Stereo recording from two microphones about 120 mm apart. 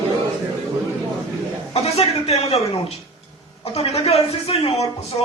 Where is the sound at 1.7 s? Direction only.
60° left (ahead or behind).